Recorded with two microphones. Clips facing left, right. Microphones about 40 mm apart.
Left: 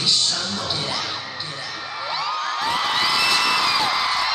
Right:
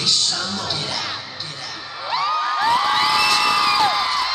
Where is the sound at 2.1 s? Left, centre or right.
Centre.